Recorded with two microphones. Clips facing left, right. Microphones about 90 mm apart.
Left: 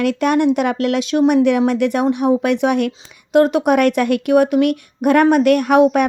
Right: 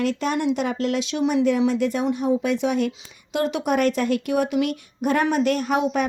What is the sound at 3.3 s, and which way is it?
Speech, 50° left (ahead or behind).